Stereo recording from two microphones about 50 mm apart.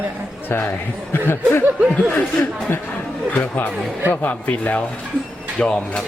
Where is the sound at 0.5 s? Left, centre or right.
Left.